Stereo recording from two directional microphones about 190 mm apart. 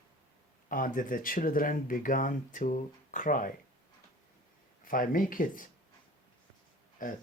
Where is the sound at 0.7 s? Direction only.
45° left (ahead or behind).